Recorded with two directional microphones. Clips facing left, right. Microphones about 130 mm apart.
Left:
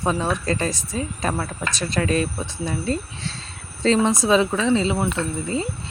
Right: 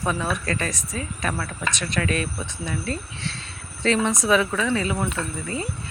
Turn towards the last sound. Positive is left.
turn(degrees=25)  # may be behind; listen again after turning